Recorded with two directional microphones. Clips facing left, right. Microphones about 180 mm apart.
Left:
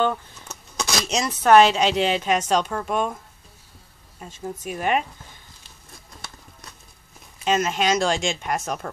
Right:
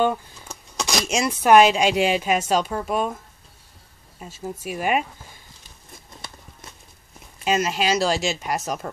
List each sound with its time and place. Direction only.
0.0 s a sound: 10° right (ahead or behind)
1.0 s speech: 10° right (ahead or behind)
4.2 s speech: 5° right (ahead or behind)
7.4 s speech: 5° right (ahead or behind)